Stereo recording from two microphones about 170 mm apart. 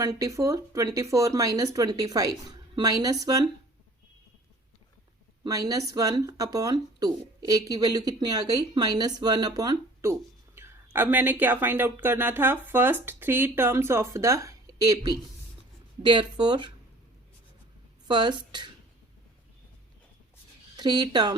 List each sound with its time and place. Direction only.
0.0 s speech: 20° right (ahead or behind)
5.4 s speech: 20° right (ahead or behind)
18.1 s speech: 25° right (ahead or behind)
20.7 s speech: 25° right (ahead or behind)